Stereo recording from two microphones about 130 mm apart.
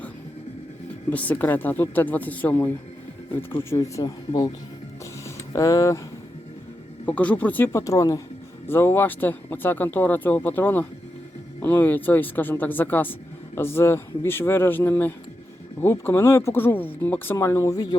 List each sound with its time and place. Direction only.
1.1 s speech: 10° left (ahead or behind); by 4.5 s 30° left (ahead or behind)
5.5 s speech: 25° left (ahead or behind)
7.0 s speech: 10° left (ahead or behind); by 17.9 s 25° left (ahead or behind)